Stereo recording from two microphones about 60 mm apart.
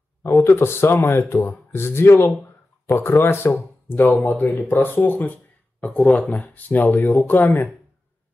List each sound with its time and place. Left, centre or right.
0.2 s speech: left
3.9 s speech: left